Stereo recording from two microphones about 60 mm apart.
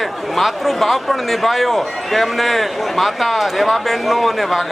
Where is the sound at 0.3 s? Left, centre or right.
Centre.